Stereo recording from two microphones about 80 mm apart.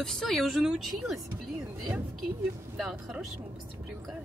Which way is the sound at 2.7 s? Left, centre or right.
Centre.